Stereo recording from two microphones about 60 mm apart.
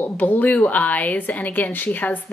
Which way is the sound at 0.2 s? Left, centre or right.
Left.